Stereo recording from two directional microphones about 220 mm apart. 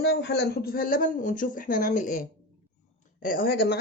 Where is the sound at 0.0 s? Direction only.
50° left (ahead or behind); by 2.2 s 35° left (ahead or behind).